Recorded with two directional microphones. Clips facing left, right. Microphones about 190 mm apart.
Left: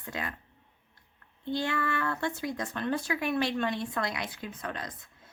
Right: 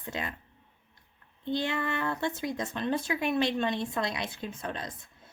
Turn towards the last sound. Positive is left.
turn(degrees=-25)  # may be behind; listen again after turning